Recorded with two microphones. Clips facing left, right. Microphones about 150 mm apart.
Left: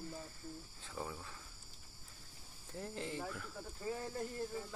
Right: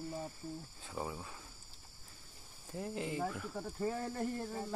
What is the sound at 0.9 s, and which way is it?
Speech, 25° right (ahead or behind).